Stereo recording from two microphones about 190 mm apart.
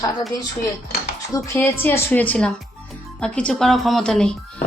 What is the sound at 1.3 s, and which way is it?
A woman's voice, 10° left (ahead or behind).